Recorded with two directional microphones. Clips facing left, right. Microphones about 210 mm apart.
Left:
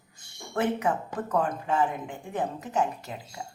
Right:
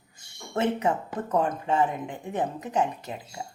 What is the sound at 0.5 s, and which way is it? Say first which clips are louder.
Speech: right 1 dB; 25° right (ahead or behind).